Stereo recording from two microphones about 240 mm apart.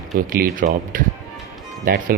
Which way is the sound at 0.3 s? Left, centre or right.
Right.